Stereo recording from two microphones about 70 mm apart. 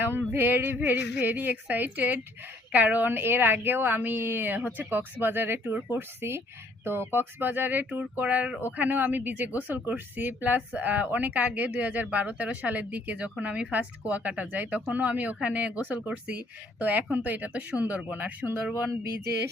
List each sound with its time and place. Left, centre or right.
0.0 s speech: right